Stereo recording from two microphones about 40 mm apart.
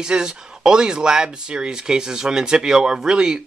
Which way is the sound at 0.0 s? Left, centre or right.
Centre.